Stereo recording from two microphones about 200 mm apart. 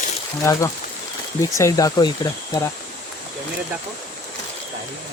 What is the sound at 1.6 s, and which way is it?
Speech, 15° left (ahead or behind).